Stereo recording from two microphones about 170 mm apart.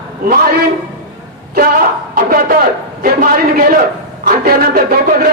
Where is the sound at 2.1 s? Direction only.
60° right (ahead or behind).